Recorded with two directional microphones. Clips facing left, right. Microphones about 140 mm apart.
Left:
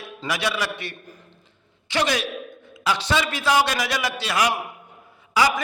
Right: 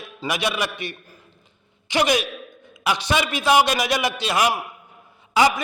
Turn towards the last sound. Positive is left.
turn(degrees=-25)  # may be behind; listen again after turning